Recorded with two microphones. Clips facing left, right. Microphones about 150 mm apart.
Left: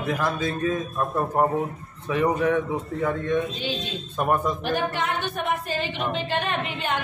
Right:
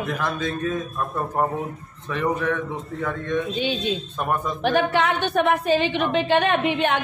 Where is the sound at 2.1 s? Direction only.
10° left (ahead or behind).